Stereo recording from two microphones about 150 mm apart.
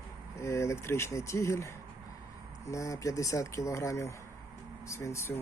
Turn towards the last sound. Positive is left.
turn(degrees=20)  # may be behind; listen again after turning